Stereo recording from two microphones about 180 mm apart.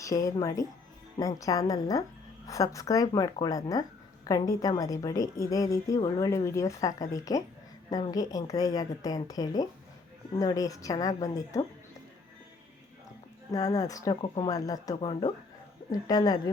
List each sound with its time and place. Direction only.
0.0 s speech: 20° left (ahead or behind)
13.5 s speech: 20° left (ahead or behind)